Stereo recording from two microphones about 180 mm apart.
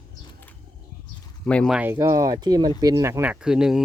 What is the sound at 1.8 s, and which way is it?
Speech, 15° right (ahead or behind).